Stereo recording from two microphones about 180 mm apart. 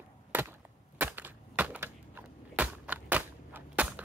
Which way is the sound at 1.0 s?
10° right (ahead or behind).